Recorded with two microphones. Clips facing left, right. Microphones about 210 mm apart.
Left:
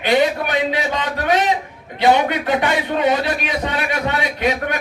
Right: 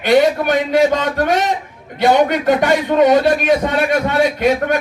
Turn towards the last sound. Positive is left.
turn(degrees=-45)  # may be behind; listen again after turning